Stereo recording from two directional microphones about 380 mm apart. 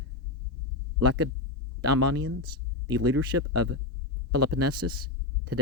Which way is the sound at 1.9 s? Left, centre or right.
Right.